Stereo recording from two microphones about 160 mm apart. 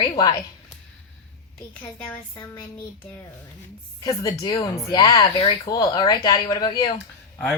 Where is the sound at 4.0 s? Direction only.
20° left (ahead or behind).